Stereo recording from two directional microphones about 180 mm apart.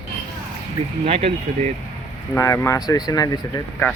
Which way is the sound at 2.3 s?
15° left (ahead or behind).